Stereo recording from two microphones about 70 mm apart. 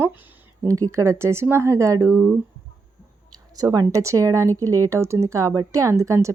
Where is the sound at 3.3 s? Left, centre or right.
Right.